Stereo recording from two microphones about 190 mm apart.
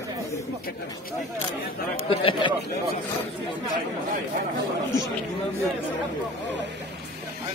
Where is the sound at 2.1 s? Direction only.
30° left (ahead or behind).